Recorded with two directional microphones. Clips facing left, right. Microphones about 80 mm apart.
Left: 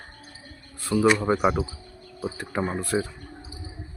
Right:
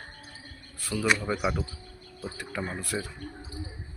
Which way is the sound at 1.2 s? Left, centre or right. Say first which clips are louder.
Left 7 dB; left.